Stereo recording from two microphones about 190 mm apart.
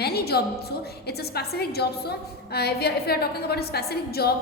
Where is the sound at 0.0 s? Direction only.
55° left (ahead or behind).